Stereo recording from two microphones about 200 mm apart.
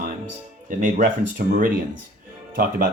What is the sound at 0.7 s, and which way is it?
Speech, 40° right (ahead or behind).